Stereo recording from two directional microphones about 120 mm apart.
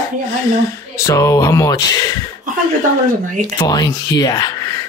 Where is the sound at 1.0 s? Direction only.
25° left (ahead or behind).